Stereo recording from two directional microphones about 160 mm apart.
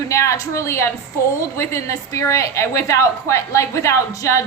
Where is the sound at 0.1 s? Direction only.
20° left (ahead or behind).